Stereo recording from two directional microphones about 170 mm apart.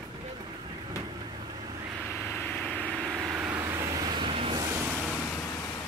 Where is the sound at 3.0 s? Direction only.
10° right (ahead or behind); by 4.6 s 35° right (ahead or behind).